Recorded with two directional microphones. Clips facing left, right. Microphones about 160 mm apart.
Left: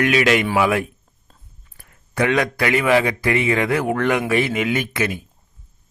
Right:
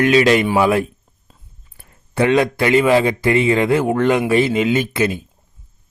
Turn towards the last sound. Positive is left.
turn(degrees=-25)  # may be behind; listen again after turning